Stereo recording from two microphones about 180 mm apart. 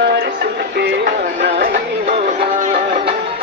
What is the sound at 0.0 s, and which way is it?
Music, 65° right (ahead or behind).